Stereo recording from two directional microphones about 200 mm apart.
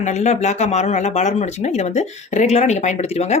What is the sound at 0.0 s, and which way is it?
Speech, 35° left (ahead or behind).